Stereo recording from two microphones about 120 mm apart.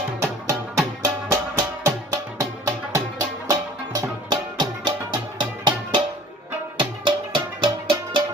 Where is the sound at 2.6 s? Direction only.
25° right (ahead or behind); by 7.9 s 40° right (ahead or behind).